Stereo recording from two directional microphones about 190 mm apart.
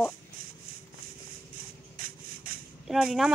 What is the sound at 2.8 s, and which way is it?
Speech, 5° right (ahead or behind).